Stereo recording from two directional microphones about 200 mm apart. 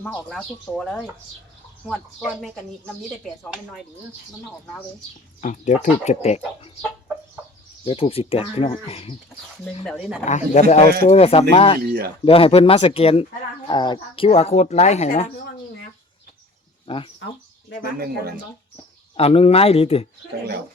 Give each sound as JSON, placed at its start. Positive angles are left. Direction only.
{"t": 0.0, "sound": "speech", "side_deg": 5}
{"t": 5.4, "sound": "speech", "side_deg": 35}
{"t": 7.9, "sound": "speech", "side_deg": 30}
{"t": 9.8, "sound": "speech", "side_deg": 0}
{"t": 10.2, "sound": "speech", "side_deg": 35}
{"t": 11.8, "sound": "speech", "side_deg": -50}
{"t": 12.2, "sound": "speech", "side_deg": 30}
{"t": 16.8, "sound": "speech", "side_deg": 25}
{"t": 19.1, "sound": "speech", "side_deg": 30}